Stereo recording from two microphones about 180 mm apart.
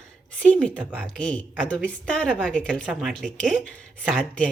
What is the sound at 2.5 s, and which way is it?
A woman's voice, 5° left (ahead or behind).